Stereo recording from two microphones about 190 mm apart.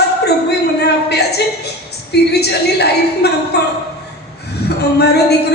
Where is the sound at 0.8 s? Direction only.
60° left (ahead or behind).